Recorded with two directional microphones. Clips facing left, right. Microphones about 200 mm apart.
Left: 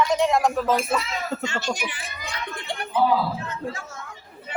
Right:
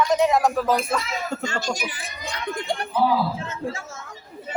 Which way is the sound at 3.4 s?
25° right (ahead or behind).